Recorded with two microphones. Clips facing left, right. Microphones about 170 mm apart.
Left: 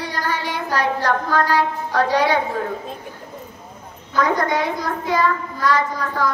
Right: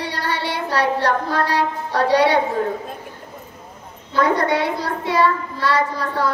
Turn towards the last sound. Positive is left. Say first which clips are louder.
# right 1 dB
turn(degrees=-30)  # may be behind; listen again after turning